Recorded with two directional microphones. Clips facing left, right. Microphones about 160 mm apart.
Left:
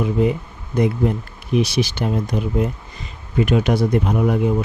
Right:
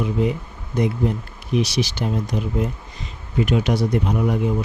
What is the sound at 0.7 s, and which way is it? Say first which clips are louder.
Speech: left 3 dB; 55° left (ahead or behind).